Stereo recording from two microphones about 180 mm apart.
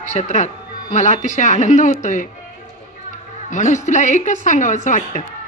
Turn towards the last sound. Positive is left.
turn(degrees=40)  # may be behind; listen again after turning